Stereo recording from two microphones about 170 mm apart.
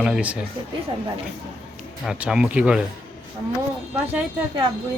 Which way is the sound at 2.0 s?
5° right (ahead or behind).